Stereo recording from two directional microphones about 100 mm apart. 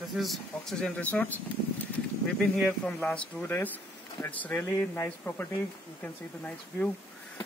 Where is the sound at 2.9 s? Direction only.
15° left (ahead or behind).